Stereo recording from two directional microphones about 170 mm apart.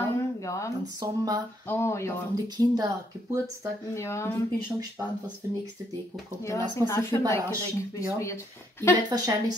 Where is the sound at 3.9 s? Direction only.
15° left (ahead or behind).